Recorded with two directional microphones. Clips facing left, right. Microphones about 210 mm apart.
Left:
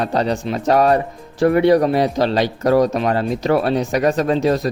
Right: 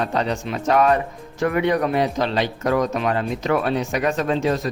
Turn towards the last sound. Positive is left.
turn(degrees=35)  # may be behind; listen again after turning